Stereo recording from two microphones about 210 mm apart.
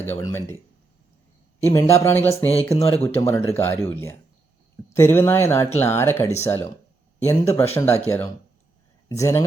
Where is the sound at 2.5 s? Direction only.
30° left (ahead or behind).